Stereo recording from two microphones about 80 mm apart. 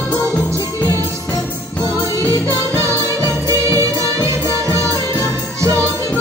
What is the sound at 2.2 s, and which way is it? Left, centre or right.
Music, right.